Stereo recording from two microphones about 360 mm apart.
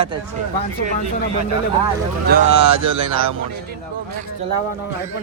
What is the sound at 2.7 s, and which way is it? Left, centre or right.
Speech, right.